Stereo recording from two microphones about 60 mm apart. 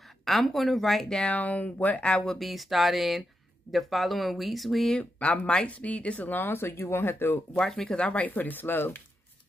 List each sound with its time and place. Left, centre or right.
0.2 s speech: centre
1.2 s speech: left
2.3 s speech: centre
4.9 s speech: centre; by 7.3 s left
7.6 s speech: centre; by 9.0 s left